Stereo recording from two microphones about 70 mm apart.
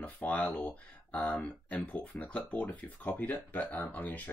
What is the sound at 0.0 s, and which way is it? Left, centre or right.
Speech, left.